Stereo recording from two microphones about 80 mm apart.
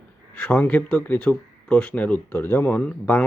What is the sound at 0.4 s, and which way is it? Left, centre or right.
Speech, centre.